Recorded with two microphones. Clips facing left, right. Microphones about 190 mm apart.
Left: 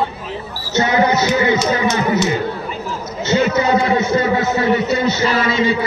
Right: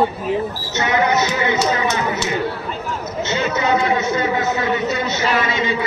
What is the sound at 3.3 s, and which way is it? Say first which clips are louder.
A man's voice: left 5 dB; 35° left (ahead or behind).